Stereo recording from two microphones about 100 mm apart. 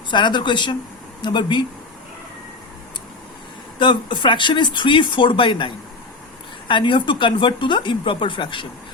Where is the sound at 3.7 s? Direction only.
50° left (ahead or behind).